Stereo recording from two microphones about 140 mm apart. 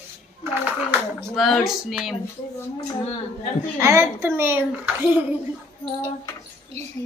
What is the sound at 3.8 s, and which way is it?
Speech, 20° right (ahead or behind).